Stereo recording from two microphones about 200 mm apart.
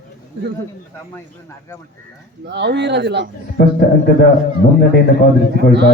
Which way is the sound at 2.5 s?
60° right (ahead or behind).